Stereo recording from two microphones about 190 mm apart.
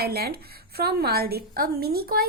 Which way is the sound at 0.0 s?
55° right (ahead or behind).